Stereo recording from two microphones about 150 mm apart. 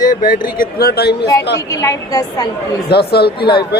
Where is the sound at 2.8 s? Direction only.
90° left.